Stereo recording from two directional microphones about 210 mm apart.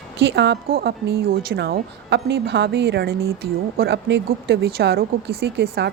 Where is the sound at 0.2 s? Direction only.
55° right (ahead or behind).